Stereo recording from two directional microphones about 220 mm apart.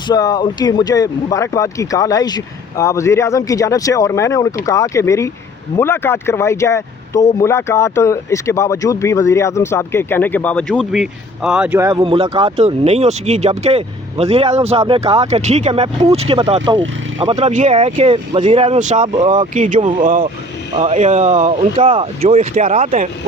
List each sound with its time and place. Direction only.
0.1 s speech: 20° left (ahead or behind); by 23.0 s 35° right (ahead or behind)